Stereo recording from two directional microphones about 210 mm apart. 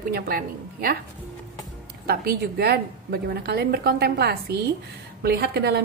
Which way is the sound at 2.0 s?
45° right (ahead or behind).